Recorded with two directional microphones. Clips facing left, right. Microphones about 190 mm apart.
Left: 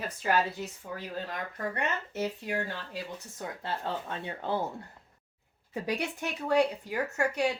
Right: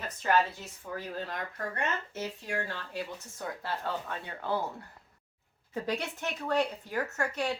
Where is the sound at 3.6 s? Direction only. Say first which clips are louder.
Left 2 dB; 20° left (ahead or behind).